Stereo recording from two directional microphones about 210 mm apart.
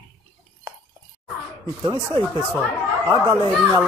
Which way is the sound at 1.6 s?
20° right (ahead or behind).